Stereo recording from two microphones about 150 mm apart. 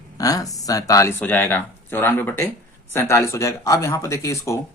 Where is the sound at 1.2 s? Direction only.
10° left (ahead or behind).